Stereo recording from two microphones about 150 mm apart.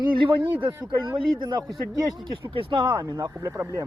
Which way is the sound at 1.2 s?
30° right (ahead or behind).